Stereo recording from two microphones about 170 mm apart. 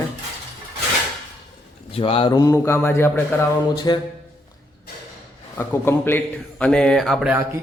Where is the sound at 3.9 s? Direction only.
25° left (ahead or behind).